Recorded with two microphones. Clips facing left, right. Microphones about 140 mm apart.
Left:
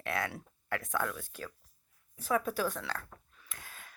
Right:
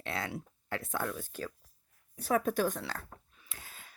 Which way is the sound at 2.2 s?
45° right (ahead or behind).